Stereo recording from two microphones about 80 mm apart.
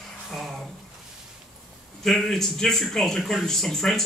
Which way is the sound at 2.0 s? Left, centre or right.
Centre.